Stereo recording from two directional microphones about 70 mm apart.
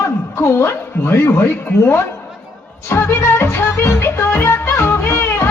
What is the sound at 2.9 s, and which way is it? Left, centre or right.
Music, left.